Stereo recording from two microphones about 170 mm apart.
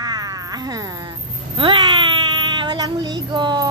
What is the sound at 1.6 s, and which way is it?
Child singing, 30° right (ahead or behind).